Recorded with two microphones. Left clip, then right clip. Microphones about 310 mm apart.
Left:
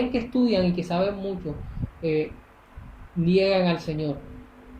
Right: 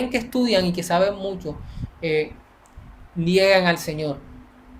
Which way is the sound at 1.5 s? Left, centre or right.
Right.